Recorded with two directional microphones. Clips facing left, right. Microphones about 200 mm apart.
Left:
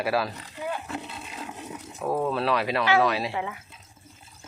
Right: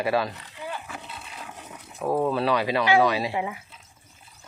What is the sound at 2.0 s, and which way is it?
Speech, 5° right (ahead or behind).